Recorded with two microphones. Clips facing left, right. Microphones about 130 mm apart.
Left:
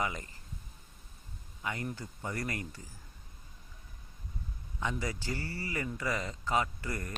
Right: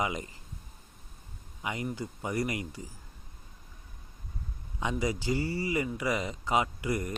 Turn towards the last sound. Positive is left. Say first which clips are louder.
# right 7 dB
turn(degrees=-15)  # may be behind; listen again after turning